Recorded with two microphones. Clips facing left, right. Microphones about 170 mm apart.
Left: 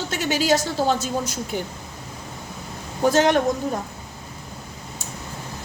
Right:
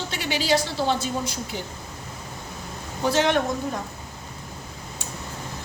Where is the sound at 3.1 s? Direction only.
45° left (ahead or behind).